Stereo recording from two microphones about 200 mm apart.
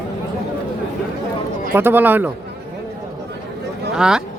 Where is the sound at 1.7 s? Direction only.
10° right (ahead or behind).